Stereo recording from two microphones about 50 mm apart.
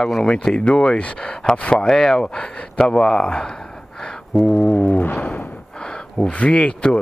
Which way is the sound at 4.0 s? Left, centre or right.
Centre.